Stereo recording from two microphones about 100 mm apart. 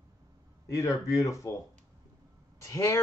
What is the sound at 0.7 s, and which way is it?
Speech, 30° left (ahead or behind).